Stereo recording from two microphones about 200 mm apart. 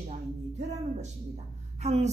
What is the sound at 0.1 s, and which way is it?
Music, 35° right (ahead or behind).